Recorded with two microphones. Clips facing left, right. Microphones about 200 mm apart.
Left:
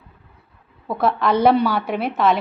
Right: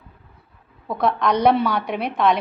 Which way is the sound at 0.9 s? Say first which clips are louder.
Left 1 dB; 5° left (ahead or behind).